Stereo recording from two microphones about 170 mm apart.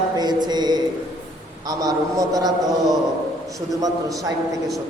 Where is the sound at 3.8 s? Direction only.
20° right (ahead or behind).